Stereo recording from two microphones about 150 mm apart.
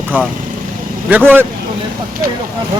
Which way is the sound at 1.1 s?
10° right (ahead or behind).